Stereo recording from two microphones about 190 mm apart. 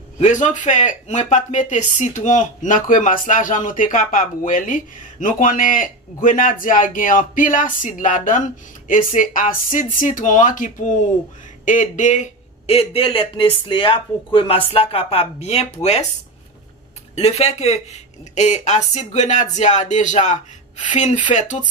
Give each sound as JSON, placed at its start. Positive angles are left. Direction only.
{"t": 0.2, "sound": "speech", "side_deg": 40}
{"t": 17.1, "sound": "speech", "side_deg": 35}